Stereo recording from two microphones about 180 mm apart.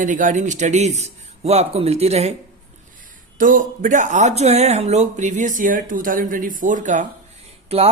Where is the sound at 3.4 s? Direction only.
45° right (ahead or behind).